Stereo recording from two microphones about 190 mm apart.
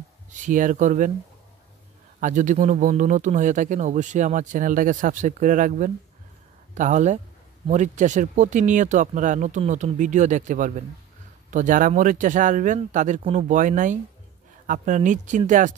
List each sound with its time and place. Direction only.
0.5 s speech: 45° right (ahead or behind)
2.1 s speech: 40° right (ahead or behind)